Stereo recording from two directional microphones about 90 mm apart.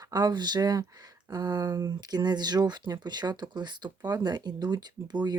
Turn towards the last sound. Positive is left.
turn(degrees=-50)  # may be behind; listen again after turning